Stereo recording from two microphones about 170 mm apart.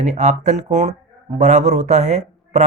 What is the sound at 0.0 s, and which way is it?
A man's voice, 45° right (ahead or behind).